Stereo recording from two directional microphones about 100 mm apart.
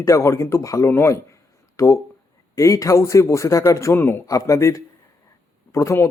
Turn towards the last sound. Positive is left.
turn(degrees=30)  # may be behind; listen again after turning